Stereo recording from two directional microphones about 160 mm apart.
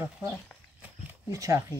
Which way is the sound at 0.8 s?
15° right (ahead or behind).